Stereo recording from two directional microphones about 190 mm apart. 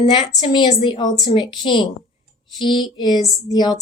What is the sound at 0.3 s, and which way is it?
A woman's voice, 25° left (ahead or behind).